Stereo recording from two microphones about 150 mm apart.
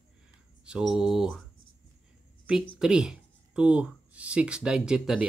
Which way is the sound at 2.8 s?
5° right (ahead or behind).